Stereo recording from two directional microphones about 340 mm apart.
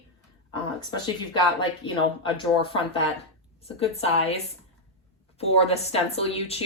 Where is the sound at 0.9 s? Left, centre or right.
Centre.